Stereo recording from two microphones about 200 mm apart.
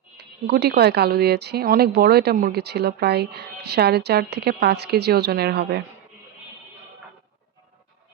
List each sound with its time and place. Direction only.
0.2 s speech: 55° right (ahead or behind)